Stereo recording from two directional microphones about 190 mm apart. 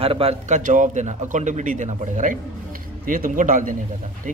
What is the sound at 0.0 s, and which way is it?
A man's voice, 30° right (ahead or behind).